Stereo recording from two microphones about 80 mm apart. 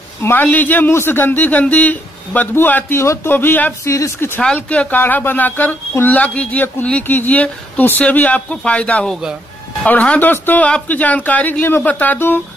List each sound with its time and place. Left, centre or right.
0.2 s speech: left
3.8 s speech: left
4.6 s speech: centre